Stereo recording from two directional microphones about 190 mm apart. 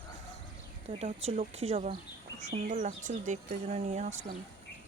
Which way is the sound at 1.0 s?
35° right (ahead or behind).